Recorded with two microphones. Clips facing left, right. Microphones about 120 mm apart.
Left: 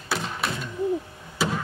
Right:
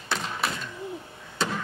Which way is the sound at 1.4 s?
5° left (ahead or behind).